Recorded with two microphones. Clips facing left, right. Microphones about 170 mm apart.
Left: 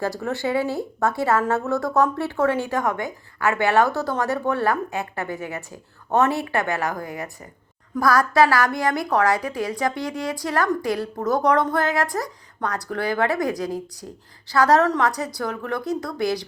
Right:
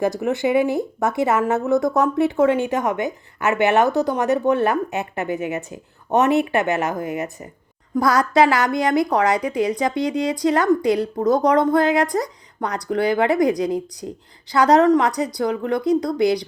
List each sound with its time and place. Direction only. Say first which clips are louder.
0.0 s speech: right 5 dB; 15° right (ahead or behind)